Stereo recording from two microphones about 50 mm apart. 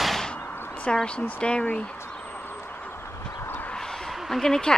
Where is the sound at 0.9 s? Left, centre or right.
Centre.